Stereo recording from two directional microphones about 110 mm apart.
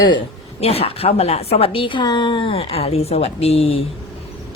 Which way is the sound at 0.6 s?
70° left (ahead or behind).